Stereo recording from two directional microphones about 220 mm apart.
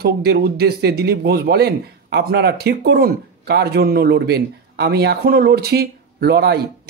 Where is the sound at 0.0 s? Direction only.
45° right (ahead or behind).